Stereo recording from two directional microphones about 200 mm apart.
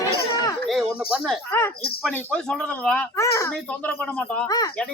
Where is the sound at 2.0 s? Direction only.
5° left (ahead or behind).